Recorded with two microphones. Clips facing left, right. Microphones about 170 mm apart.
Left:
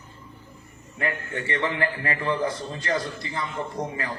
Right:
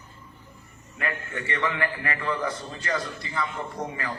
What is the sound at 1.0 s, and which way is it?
A man's voice, 30° left (ahead or behind).